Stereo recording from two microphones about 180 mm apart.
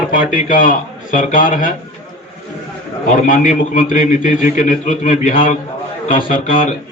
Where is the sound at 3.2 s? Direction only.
45° left (ahead or behind).